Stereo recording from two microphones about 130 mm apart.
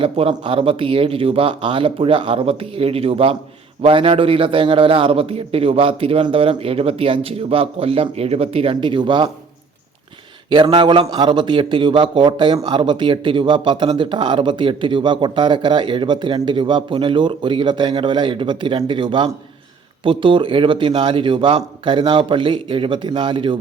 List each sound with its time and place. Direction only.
0.0 s a man's voice: 45° right (ahead or behind)
10.5 s speech: 35° right (ahead or behind)